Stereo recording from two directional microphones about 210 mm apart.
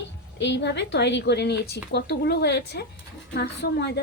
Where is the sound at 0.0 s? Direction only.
55° left (ahead or behind).